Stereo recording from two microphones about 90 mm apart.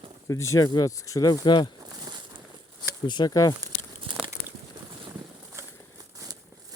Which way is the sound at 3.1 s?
55° left (ahead or behind).